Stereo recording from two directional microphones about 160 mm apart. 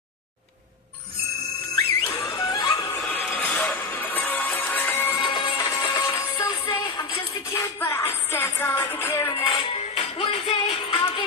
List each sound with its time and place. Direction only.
2.0 s music: 20° left (ahead or behind)
3.1 s music: 10° left (ahead or behind)
5.2 s music: 30° left (ahead or behind)
5.8 s music: 20° left (ahead or behind)
9.3 s music: 35° left (ahead or behind)